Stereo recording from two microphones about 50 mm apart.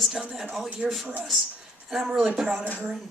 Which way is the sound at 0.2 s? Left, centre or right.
Centre.